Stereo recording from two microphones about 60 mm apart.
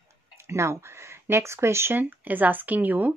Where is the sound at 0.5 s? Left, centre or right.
Right.